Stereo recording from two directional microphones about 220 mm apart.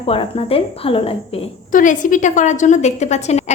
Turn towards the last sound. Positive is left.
turn(degrees=30)  # may be behind; listen again after turning